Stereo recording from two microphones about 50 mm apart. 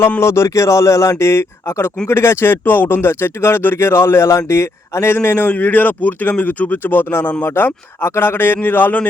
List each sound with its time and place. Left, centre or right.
0.2 s speech: left
5.5 s a man's voice: left